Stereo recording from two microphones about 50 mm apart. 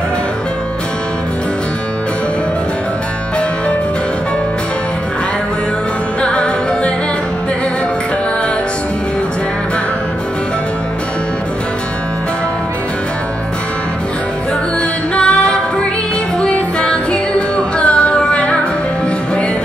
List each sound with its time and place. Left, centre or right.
6.2 s music: left
15.1 s music: left